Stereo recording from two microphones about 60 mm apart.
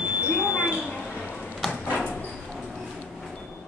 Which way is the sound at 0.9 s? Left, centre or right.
Left.